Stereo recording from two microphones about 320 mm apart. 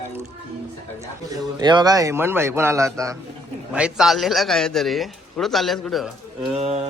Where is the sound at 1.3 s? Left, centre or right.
Centre.